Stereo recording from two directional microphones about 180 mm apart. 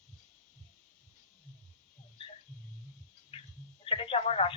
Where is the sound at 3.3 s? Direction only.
30° left (ahead or behind).